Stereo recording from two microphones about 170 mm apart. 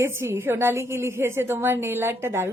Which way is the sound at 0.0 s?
15° right (ahead or behind).